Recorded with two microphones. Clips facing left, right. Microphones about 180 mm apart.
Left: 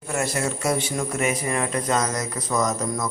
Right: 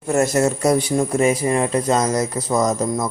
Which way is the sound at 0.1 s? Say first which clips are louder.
Right 8 dB; 45° right (ahead or behind).